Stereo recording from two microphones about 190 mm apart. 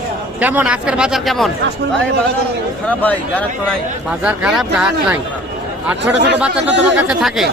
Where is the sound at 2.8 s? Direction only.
10° left (ahead or behind).